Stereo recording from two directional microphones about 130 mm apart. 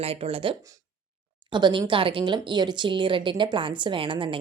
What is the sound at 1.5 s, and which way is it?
A woman's voice, 35° right (ahead or behind).